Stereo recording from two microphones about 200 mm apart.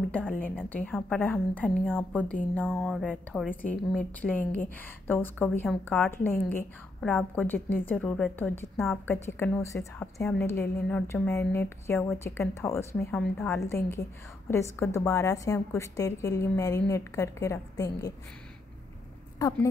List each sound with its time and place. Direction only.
0.1 s a woman's voice: 10° left (ahead or behind)
19.3 s speech: 15° left (ahead or behind)